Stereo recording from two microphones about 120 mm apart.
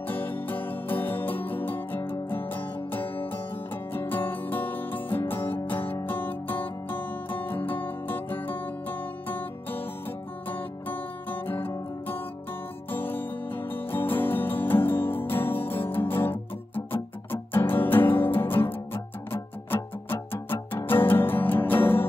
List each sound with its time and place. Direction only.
0.1 s music: 15° left (ahead or behind)
10.5 s music: 15° left (ahead or behind)